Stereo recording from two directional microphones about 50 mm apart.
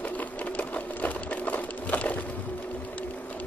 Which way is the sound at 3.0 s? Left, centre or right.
Left.